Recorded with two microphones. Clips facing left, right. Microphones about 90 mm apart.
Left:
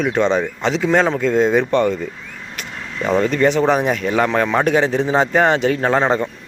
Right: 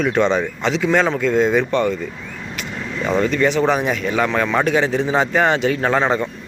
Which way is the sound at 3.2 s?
40° left (ahead or behind).